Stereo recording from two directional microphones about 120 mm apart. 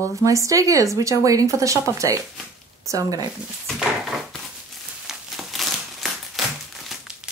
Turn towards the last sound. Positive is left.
turn(degrees=-5)  # may be behind; listen again after turning